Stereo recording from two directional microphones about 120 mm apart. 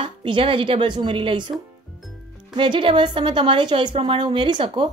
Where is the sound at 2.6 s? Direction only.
45° right (ahead or behind).